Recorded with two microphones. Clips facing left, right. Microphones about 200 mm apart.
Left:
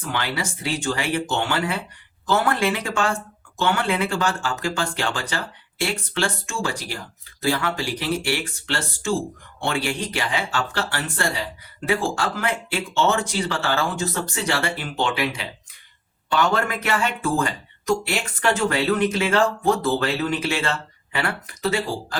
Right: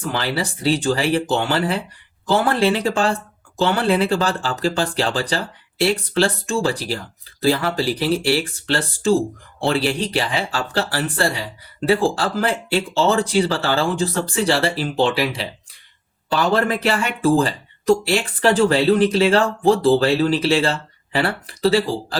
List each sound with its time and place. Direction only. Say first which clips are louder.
0.1 s speech: right 3 dB; 35° right (ahead or behind)